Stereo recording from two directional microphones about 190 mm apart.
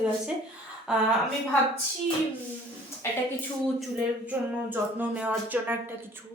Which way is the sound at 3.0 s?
15° left (ahead or behind).